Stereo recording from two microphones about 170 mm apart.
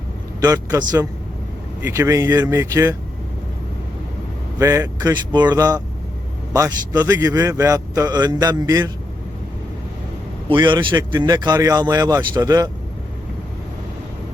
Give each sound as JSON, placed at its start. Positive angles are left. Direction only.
{"t": 0.4, "sound": "a man's voice", "side_deg": -20}
{"t": 4.5, "sound": "a man's voice", "side_deg": -20}
{"t": 10.5, "sound": "a man's voice", "side_deg": -30}